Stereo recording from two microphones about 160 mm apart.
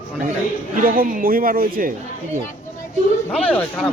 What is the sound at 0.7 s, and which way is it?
Speech, 60° right (ahead or behind).